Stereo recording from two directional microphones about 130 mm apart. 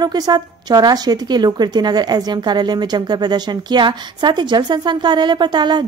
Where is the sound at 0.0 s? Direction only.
30° right (ahead or behind).